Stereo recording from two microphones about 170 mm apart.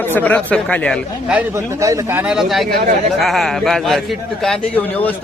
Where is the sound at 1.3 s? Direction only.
15° right (ahead or behind); by 2.7 s centre (ahead or behind).